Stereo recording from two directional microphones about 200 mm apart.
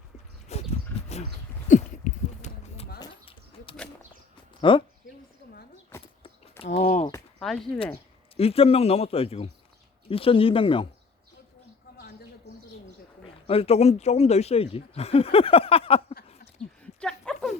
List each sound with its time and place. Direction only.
0.5 s a sound: 30° left (ahead or behind)
3.0 s bird: 25° left (ahead or behind)
4.7 s speech: 25° left (ahead or behind)
6.6 s speech: 35° left (ahead or behind)
7.3 s speech: 5° left (ahead or behind)
8.4 s speech: 30° left (ahead or behind)
13.5 s speech: 30° left (ahead or behind)
16.8 s a sound: 5° left (ahead or behind)